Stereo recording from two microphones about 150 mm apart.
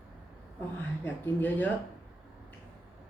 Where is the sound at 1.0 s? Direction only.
10° left (ahead or behind).